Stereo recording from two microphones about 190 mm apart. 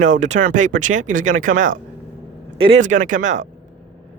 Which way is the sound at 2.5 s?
30° right (ahead or behind).